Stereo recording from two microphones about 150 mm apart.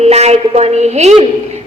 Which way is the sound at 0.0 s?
45° right (ahead or behind).